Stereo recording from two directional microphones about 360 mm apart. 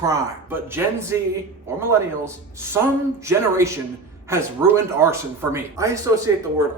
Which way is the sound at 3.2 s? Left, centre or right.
Centre.